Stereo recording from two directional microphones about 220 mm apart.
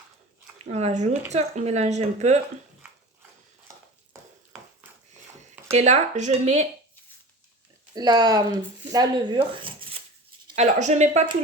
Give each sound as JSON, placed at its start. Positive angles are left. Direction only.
{"t": 0.6, "sound": "a woman's voice", "side_deg": -30}
{"t": 5.7, "sound": "a woman's voice", "side_deg": -30}
{"t": 7.9, "sound": "speech", "side_deg": -20}
{"t": 10.5, "sound": "a woman's voice", "side_deg": -30}